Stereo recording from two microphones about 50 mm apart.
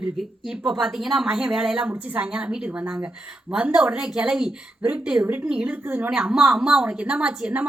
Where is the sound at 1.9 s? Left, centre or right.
Right.